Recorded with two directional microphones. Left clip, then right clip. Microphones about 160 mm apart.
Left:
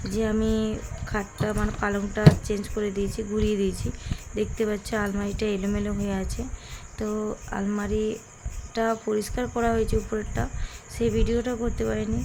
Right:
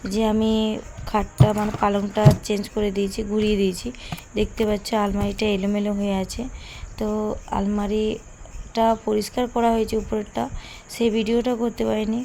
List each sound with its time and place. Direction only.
0.1 s a woman's voice: 25° right (ahead or behind)